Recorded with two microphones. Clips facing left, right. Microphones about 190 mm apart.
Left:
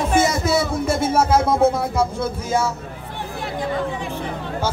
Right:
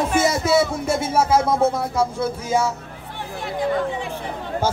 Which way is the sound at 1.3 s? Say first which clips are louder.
Left 1 dB; 5° left (ahead or behind).